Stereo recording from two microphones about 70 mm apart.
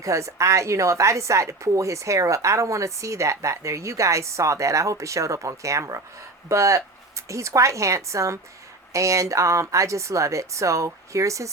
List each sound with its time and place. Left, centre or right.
0.0 s a woman's voice: right